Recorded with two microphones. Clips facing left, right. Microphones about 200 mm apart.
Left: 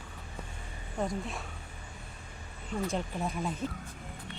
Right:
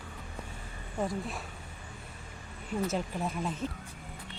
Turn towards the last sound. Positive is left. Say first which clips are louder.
# even
turn(degrees=0)  # may be behind; listen again after turning